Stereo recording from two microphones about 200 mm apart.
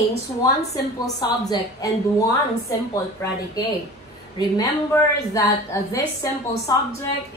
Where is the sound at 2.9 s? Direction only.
15° left (ahead or behind).